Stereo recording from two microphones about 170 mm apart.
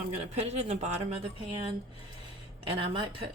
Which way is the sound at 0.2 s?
40° right (ahead or behind).